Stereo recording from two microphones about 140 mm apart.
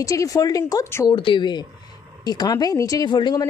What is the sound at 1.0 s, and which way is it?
Speech, 35° left (ahead or behind).